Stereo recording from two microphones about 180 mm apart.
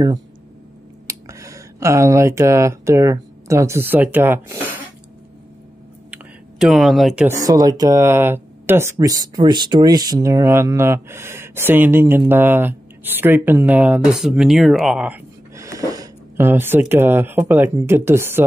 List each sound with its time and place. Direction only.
1.0 s speech: 15° right (ahead or behind)
6.0 s a sound: 5° right (ahead or behind)
7.4 s speech: 20° right (ahead or behind)